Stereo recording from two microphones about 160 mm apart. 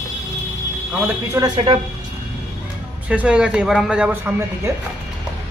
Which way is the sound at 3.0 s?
10° right (ahead or behind).